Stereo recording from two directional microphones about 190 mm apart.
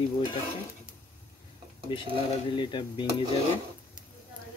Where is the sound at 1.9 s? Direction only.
25° left (ahead or behind).